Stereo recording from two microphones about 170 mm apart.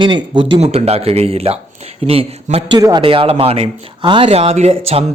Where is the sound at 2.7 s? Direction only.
25° right (ahead or behind).